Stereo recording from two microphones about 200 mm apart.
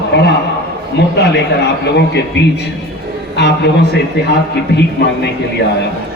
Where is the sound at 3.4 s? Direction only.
60° left (ahead or behind).